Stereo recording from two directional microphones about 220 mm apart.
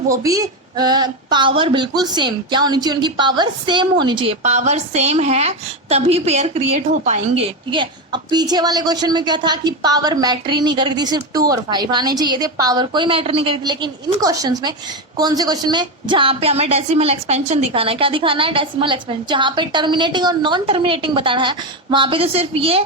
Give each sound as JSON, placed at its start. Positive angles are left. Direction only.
{"t": 0.1, "sound": "speech", "side_deg": -15}
{"t": 7.7, "sound": "speech", "side_deg": -20}